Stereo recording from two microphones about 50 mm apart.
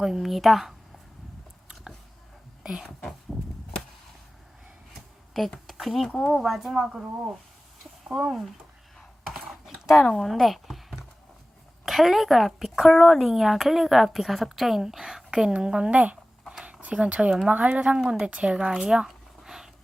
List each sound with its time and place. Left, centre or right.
0.0 s a woman's voice: centre
2.6 s speech: centre
3.0 s a woman's voice: centre
5.6 s a woman's voice: centre
8.0 s speech: centre
9.3 s computer keyboard: centre
10.2 s a sound: centre
11.9 s a woman's voice: centre
15.5 s a woman's voice: centre
19.5 s a sound: centre